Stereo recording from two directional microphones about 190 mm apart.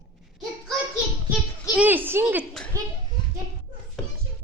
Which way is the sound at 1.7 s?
10° right (ahead or behind).